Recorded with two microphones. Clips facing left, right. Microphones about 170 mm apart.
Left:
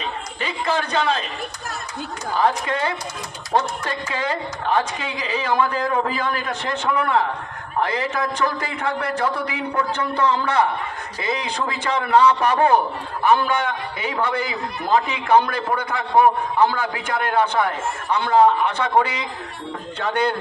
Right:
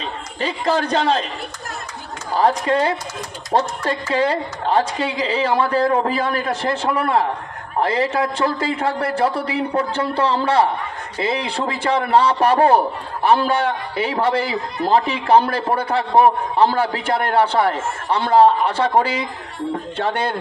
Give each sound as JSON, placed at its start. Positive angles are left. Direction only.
{"t": 0.4, "sound": "a woman's voice", "side_deg": -40}
{"t": 2.3, "sound": "a woman's voice", "side_deg": -35}